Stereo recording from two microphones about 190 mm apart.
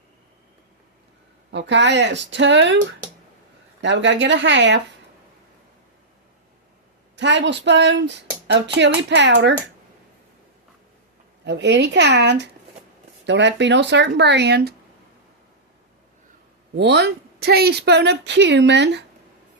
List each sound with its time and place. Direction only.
1.5 s speech: 70° right (ahead or behind)
3.8 s speech: 70° right (ahead or behind)
7.2 s speech: 70° right (ahead or behind)
11.4 s a woman's voice: 65° right (ahead or behind)
16.7 s a woman's voice: 65° right (ahead or behind)